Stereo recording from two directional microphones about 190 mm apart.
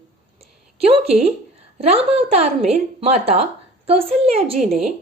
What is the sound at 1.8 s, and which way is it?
A woman's voice, 30° right (ahead or behind).